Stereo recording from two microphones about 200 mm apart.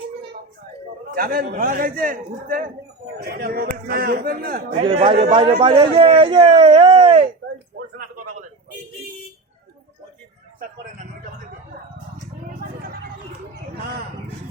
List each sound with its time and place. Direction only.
1.1 s a man's voice: 45° right (ahead or behind)
4.9 s a man's voice: 25° right (ahead or behind)
10.6 s a sound: 40° right (ahead or behind)